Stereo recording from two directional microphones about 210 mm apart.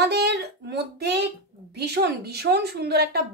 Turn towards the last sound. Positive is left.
turn(degrees=-50)  # may be behind; listen again after turning